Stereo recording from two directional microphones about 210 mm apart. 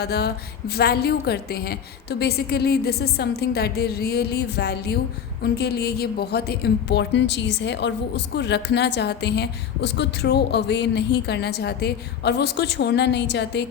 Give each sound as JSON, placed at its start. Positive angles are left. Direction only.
{"t": 0.0, "sound": "a woman's voice", "side_deg": 50}